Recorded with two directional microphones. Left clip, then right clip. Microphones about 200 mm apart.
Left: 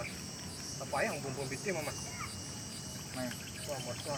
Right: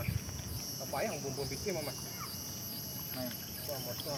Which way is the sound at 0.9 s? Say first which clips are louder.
Left 2 dB; 10° right (ahead or behind).